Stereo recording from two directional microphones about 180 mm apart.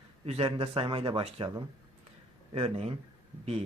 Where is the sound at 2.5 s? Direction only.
35° right (ahead or behind).